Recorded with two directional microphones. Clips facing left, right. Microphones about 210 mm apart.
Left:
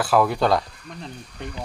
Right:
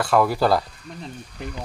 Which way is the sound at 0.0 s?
Centre (ahead or behind).